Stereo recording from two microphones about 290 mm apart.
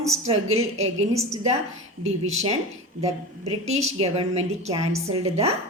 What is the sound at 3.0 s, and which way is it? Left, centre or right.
A woman's voice, right.